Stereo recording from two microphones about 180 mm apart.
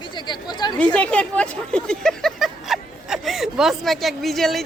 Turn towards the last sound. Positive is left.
turn(degrees=0)  # may be behind; listen again after turning